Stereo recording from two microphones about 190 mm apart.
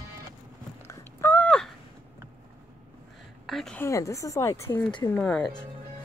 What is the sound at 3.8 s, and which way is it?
Speech, 15° left (ahead or behind).